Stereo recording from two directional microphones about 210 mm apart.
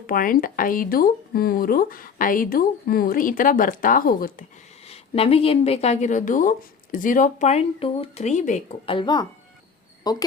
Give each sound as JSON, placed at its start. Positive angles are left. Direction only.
{"t": 0.1, "sound": "speech", "side_deg": 40}
{"t": 4.9, "sound": "speech", "side_deg": 30}
{"t": 9.0, "sound": "speech", "side_deg": 20}